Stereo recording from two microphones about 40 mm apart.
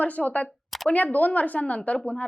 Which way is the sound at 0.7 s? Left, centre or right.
Centre.